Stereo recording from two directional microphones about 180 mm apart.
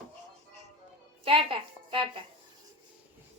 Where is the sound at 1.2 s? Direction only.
30° right (ahead or behind).